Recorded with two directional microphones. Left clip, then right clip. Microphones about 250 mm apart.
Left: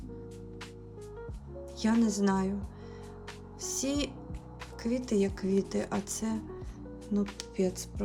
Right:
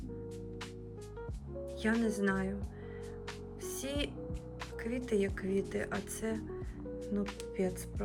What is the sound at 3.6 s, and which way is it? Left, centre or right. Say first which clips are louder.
Speech: left 5 dB; centre.